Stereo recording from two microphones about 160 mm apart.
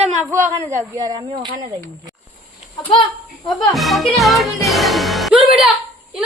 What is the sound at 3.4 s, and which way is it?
Speech, centre (ahead or behind).